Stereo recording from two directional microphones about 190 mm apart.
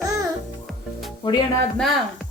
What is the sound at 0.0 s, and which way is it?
Music, 20° right (ahead or behind).